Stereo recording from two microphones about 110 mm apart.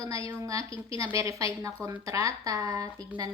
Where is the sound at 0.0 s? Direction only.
30° right (ahead or behind).